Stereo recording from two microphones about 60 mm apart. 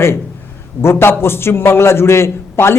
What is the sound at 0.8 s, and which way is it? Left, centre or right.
A man's voice, left.